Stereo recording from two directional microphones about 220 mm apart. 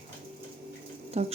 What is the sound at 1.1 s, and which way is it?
Speech, 30° right (ahead or behind).